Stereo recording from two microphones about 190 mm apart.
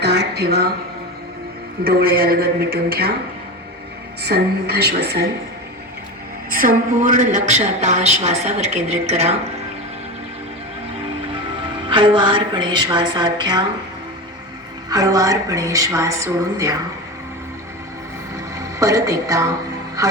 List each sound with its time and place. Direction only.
0.0 s a sound: 60° right (ahead or behind)
1.8 s a man's voice: 55° right (ahead or behind)
4.2 s a man's voice: 60° right (ahead or behind)
6.5 s a woman's voice: 50° right (ahead or behind); by 9.3 s 30° right (ahead or behind)
11.9 s a woman's voice: 25° right (ahead or behind)
14.8 s a woman's voice: 20° right (ahead or behind)
18.8 s a woman's voice: 15° right (ahead or behind)